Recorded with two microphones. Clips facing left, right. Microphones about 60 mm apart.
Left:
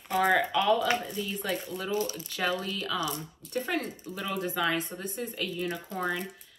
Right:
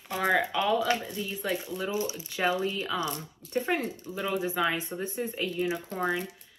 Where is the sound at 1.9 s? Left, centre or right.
Centre.